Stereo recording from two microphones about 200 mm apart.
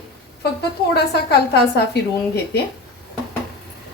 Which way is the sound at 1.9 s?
55° left (ahead or behind).